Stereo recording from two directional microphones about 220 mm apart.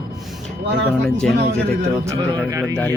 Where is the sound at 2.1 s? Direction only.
20° right (ahead or behind).